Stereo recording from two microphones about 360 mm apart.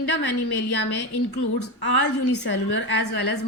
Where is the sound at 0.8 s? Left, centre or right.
Left.